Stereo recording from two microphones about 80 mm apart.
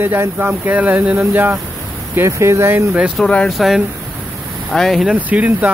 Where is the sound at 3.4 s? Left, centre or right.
Centre.